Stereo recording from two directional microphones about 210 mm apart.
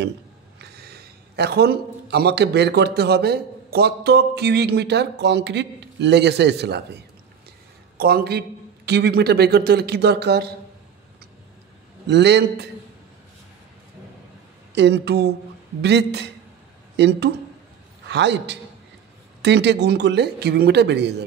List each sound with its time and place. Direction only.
0.6 s a man's voice: 50° right (ahead or behind)
12.1 s a man's voice: 55° right (ahead or behind)
14.8 s a man's voice: 55° right (ahead or behind)